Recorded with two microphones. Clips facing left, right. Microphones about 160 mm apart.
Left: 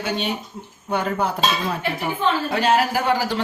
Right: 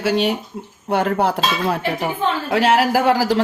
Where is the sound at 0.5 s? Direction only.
60° right (ahead or behind).